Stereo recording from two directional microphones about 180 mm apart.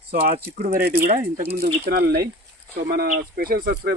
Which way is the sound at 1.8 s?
55° right (ahead or behind).